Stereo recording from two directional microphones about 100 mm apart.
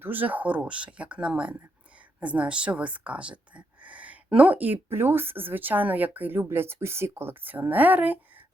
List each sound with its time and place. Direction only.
0.0 s speech: 20° right (ahead or behind)